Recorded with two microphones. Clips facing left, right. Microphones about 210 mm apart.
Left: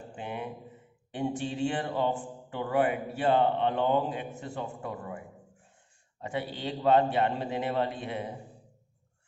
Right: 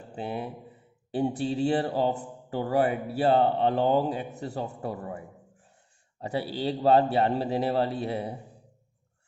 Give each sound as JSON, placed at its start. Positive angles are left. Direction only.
{"t": 0.2, "sound": "a man's voice", "side_deg": -35}